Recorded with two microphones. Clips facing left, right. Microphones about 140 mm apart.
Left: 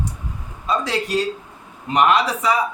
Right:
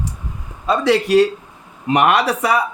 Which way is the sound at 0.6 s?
70° right (ahead or behind).